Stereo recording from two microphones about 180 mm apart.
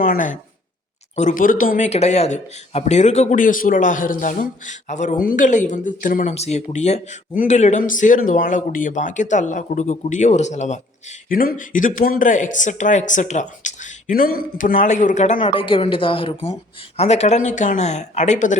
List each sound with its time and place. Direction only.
0.0 s speech: 45° left (ahead or behind)
11.3 s speech: 50° left (ahead or behind)
15.4 s speech: 30° left (ahead or behind)